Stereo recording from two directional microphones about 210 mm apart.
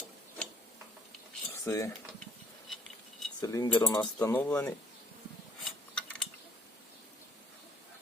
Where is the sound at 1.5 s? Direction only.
15° left (ahead or behind).